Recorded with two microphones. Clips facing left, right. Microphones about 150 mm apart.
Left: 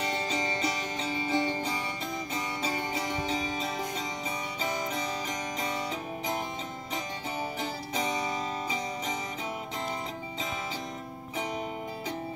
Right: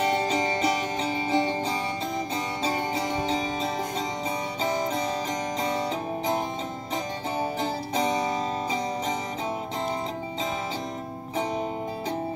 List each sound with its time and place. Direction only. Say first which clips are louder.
0.0 s music: right 7 dB; 35° right (ahead or behind)
7.3 s music: right 7 dB; 35° right (ahead or behind)